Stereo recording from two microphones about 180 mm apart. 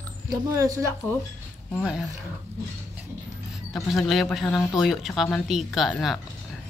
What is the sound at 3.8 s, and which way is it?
Speech, centre (ahead or behind).